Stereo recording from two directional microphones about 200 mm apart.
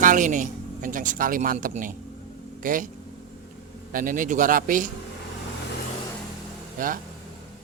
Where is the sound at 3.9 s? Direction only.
40° right (ahead or behind).